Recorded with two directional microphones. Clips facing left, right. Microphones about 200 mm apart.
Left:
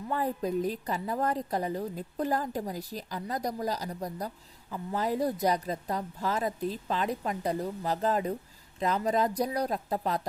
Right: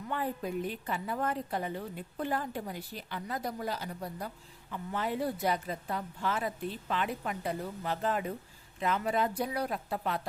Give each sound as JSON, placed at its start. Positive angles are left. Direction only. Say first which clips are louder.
{"t": 0.1, "sound": "a woman's voice", "louder": "left 4 dB", "side_deg": 40}